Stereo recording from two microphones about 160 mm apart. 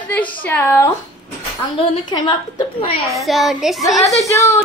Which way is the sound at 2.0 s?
25° left (ahead or behind).